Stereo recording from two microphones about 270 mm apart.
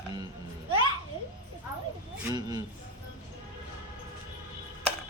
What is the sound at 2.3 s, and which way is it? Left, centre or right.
Speech, centre.